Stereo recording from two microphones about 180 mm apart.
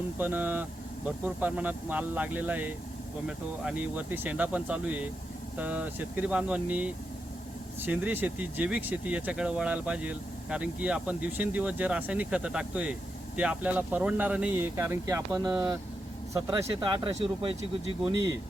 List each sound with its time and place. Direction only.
0.2 s speech: 10° right (ahead or behind); by 17.9 s 30° right (ahead or behind)